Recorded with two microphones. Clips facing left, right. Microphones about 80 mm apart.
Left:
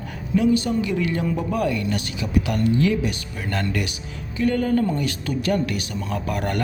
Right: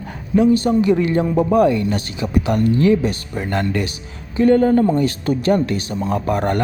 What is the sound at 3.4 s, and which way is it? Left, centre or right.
Speech, right.